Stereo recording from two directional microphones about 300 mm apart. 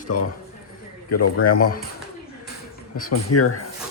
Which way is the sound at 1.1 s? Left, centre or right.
Left.